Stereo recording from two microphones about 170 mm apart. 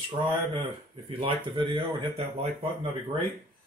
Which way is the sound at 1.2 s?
30° right (ahead or behind).